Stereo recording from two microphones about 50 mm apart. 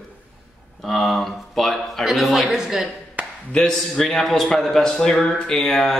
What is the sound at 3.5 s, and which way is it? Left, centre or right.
A man's voice, centre.